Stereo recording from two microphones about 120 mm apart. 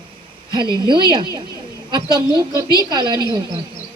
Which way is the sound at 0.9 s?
40° right (ahead or behind).